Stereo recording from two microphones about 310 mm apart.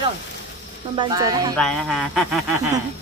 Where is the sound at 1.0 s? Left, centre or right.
Centre.